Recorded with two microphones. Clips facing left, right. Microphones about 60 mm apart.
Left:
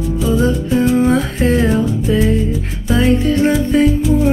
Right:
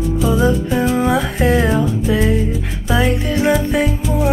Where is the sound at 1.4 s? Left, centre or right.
Right.